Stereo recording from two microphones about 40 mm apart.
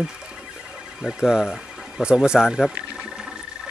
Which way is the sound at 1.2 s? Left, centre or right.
Centre.